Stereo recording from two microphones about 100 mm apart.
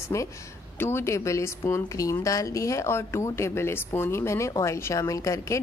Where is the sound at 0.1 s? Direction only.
30° left (ahead or behind).